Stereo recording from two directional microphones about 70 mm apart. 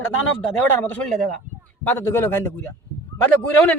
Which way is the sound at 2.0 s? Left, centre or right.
Left.